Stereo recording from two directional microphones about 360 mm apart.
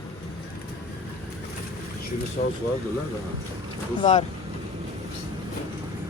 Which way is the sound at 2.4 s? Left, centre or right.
Left.